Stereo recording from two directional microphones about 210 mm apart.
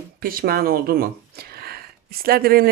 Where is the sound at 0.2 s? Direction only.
45° right (ahead or behind).